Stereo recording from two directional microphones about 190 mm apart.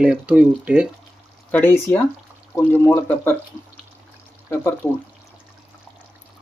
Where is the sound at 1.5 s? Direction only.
10° left (ahead or behind).